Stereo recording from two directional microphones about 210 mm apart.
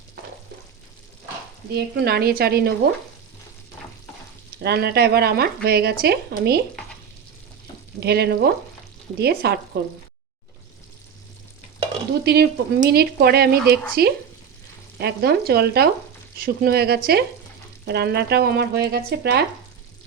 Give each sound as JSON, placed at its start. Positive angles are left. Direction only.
{"t": 1.7, "sound": "speech", "side_deg": -50}
{"t": 4.6, "sound": "speech", "side_deg": -50}
{"t": 8.0, "sound": "speech", "side_deg": -50}
{"t": 12.2, "sound": "speech", "side_deg": -50}